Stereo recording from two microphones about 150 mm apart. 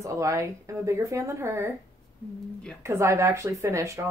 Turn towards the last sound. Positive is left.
turn(degrees=-20)  # may be behind; listen again after turning